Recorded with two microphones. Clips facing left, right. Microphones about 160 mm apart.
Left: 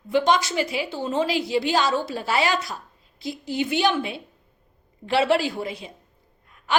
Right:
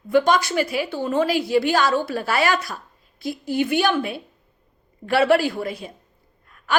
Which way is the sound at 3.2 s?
50° right (ahead or behind).